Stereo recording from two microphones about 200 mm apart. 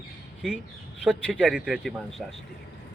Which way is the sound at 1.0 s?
5° right (ahead or behind).